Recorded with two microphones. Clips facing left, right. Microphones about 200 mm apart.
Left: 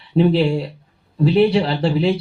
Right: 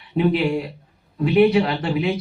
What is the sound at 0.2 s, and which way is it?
Speech, 30° left (ahead or behind).